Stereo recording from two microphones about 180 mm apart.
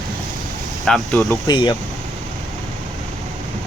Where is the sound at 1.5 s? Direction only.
25° left (ahead or behind).